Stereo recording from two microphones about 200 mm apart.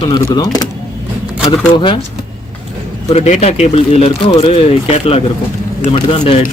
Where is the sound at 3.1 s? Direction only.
30° left (ahead or behind).